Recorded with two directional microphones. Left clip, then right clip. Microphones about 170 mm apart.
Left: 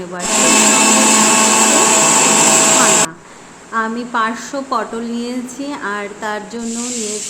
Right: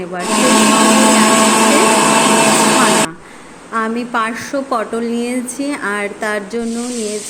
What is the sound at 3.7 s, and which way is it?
A woman's voice, 15° right (ahead or behind).